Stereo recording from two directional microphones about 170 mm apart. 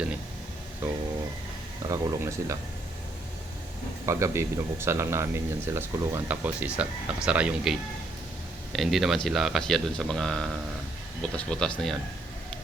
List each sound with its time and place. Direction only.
1.9 s speech: 20° right (ahead or behind)
4.0 s speech: 15° right (ahead or behind); by 11.9 s 5° left (ahead or behind)